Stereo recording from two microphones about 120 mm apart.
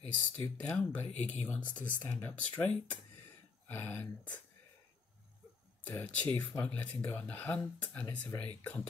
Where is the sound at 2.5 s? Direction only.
10° left (ahead or behind).